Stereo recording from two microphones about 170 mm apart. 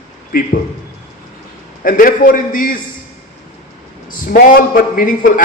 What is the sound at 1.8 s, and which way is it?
Speech, 55° left (ahead or behind).